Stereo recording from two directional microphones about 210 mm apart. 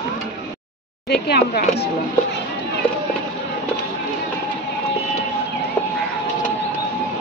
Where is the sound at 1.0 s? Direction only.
50° left (ahead or behind).